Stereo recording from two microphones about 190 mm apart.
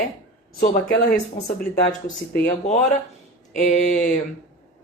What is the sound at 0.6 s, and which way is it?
Speech, 50° left (ahead or behind).